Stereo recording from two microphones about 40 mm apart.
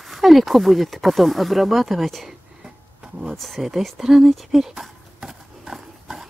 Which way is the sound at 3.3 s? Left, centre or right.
Centre.